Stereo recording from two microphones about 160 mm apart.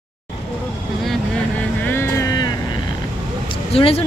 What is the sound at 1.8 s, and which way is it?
Boat, 15° left (ahead or behind).